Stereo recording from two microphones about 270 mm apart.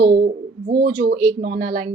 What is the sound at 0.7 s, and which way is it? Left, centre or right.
Speech, right.